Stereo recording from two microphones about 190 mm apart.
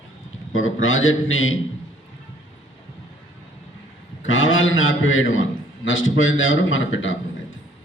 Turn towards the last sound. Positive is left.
turn(degrees=90)